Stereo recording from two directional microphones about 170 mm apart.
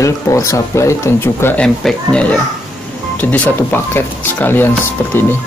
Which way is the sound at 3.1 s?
10° left (ahead or behind).